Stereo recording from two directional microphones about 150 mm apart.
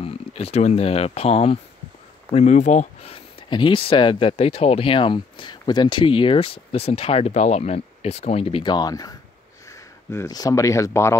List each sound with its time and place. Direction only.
0.0 s speech: 40° left (ahead or behind)
2.3 s speech: 50° left (ahead or behind); by 11.1 s 20° left (ahead or behind)